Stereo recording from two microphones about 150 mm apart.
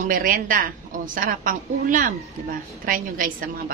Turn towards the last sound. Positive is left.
turn(degrees=-65)  # may be behind; listen again after turning